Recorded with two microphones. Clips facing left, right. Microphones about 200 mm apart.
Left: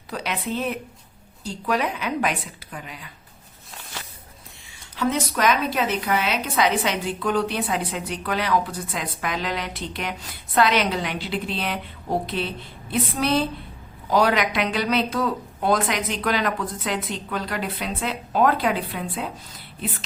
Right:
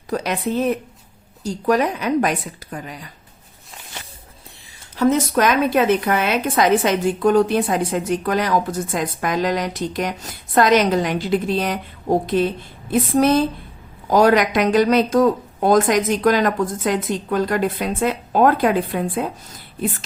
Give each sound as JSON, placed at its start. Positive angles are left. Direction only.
{"t": 0.1, "sound": "a woman's voice", "side_deg": -45}
{"t": 4.9, "sound": "a woman's voice", "side_deg": -45}